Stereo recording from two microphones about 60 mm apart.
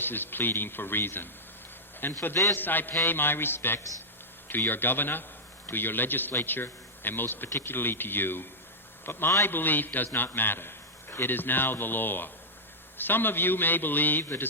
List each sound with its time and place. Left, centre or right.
0.0 s a man's voice: left